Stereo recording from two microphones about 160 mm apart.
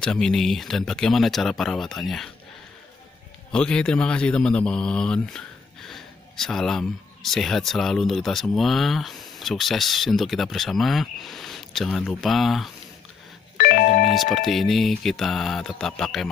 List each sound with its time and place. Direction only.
0.0 s a man's voice: 5° left (ahead or behind)
3.5 s a man's voice: 5° left (ahead or behind)
13.6 s music: 70° left (ahead or behind)
14.1 s a man's voice: centre (ahead or behind)